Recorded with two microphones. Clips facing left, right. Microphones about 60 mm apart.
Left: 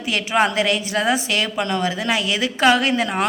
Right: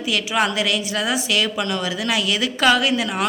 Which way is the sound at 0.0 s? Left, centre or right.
Left.